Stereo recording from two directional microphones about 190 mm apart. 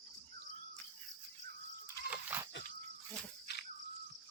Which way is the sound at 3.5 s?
60° left (ahead or behind).